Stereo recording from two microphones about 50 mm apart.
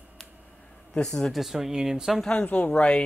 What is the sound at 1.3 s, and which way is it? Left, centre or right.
Speech, centre.